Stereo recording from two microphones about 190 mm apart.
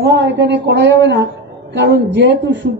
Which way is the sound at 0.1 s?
65° right (ahead or behind).